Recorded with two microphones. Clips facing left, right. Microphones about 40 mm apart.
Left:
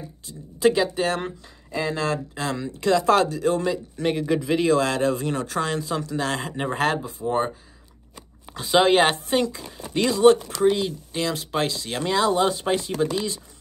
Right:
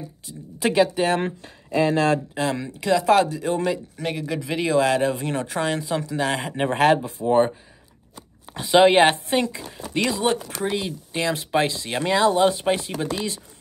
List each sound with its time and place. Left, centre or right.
0.3 s speech: right
1.4 s speech: right
2.6 s speech: centre
4.0 s speech: centre
4.6 s speech: centre
6.7 s speech: right
8.7 s speech: right